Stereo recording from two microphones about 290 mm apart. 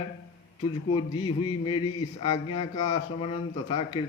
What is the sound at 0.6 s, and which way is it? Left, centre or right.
Speech, centre.